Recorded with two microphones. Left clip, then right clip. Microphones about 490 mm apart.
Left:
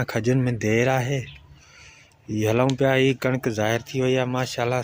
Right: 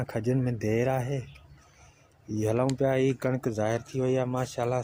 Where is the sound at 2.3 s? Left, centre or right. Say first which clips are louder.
Left 6 dB; right.